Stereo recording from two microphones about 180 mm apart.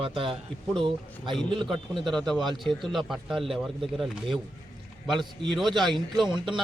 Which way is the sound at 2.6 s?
Centre (ahead or behind).